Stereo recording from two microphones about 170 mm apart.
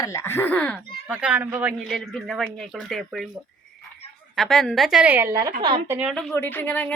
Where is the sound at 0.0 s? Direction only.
15° left (ahead or behind).